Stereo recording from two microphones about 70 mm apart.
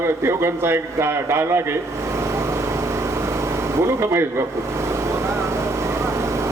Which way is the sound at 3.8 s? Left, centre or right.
Right.